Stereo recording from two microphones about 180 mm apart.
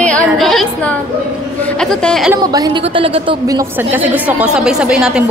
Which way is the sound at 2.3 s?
20° right (ahead or behind).